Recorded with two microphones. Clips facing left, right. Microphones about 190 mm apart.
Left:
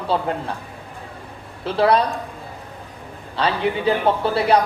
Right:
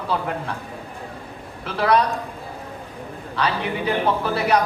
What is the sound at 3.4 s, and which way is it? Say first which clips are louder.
A man's voice: left 3 dB; 30° left (ahead or behind).